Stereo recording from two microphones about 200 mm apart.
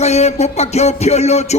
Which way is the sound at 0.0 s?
35° left (ahead or behind).